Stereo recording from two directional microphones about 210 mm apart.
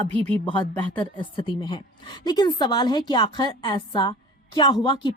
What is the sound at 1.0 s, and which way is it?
A woman's voice, 25° left (ahead or behind).